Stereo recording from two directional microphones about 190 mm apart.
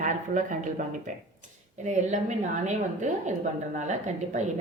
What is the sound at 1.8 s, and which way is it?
A woman's voice, 40° right (ahead or behind).